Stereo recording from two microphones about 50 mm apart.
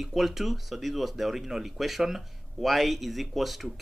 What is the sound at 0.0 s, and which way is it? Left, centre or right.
Speech, centre.